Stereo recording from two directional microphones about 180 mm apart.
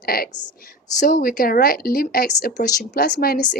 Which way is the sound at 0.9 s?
50° left (ahead or behind).